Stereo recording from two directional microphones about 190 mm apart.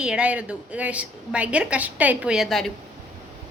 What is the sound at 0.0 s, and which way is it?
A woman's voice, 5° right (ahead or behind).